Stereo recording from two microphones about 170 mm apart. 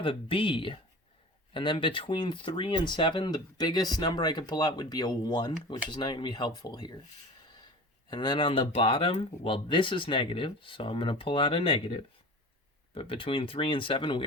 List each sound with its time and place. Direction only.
0.0 s speech: 30° left (ahead or behind)
8.1 s speech: 25° left (ahead or behind)